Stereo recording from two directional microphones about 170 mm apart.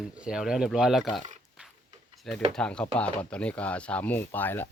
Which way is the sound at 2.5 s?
5° left (ahead or behind).